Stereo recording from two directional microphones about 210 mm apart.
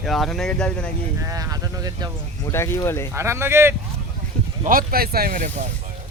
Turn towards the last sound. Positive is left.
turn(degrees=-35)  # may be behind; listen again after turning